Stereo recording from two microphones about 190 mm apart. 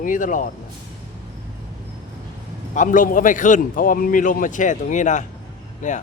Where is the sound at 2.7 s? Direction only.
45° left (ahead or behind).